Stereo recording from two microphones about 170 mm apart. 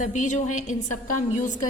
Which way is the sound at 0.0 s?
45° left (ahead or behind).